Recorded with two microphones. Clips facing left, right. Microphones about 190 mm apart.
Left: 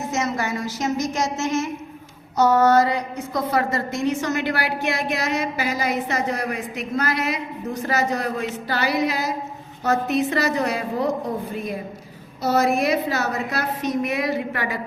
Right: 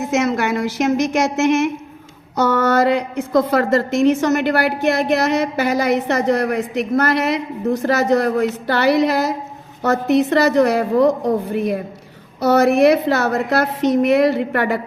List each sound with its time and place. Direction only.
0.1 s a woman's voice: 65° right (ahead or behind)
2.7 s a woman's voice: 80° right; by 14.8 s 60° right (ahead or behind)